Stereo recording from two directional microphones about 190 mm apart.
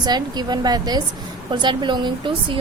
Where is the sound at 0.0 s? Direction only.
20° right (ahead or behind).